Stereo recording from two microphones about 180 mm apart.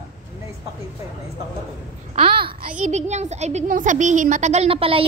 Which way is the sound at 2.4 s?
40° right (ahead or behind).